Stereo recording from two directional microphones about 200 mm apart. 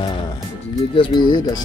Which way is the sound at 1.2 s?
20° left (ahead or behind).